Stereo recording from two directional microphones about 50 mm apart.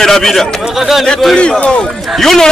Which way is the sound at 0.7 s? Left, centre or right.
Centre.